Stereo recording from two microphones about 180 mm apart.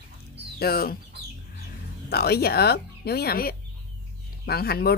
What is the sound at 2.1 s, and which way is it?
A woman's voice, 60° left (ahead or behind).